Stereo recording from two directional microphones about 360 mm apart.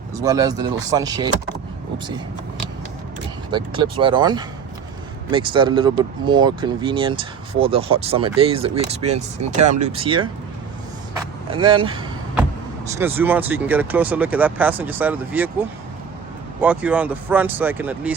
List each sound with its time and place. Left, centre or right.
0.2 s speech: centre
3.5 s speech: centre
11.5 s speech: centre
16.6 s speech: centre